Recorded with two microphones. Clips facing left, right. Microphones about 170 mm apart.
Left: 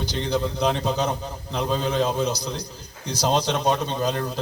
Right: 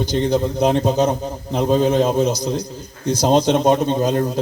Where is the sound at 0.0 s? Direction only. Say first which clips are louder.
Right 7 dB; 45° right (ahead or behind).